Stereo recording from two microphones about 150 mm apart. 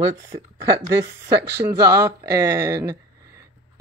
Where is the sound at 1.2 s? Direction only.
20° right (ahead or behind).